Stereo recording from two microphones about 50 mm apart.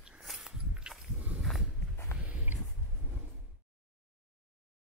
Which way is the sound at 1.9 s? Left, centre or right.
Left.